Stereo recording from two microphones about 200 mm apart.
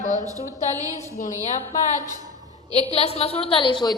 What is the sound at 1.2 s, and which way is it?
Speech, 40° left (ahead or behind).